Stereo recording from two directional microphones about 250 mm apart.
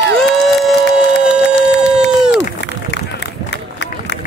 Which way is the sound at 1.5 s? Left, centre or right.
Left.